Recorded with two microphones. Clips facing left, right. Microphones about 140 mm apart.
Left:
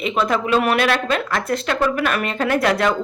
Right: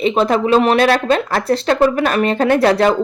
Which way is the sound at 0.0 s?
30° right (ahead or behind).